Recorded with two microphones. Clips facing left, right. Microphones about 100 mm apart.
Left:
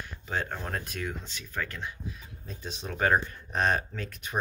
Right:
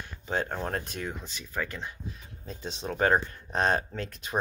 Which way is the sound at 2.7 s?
25° right (ahead or behind).